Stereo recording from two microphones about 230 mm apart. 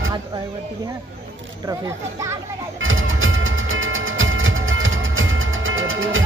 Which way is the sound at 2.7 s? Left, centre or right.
Right.